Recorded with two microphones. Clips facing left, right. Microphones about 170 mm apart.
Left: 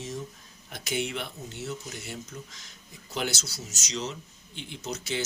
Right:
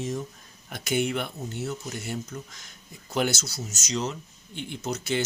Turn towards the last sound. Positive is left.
turn(degrees=-50)  # may be behind; listen again after turning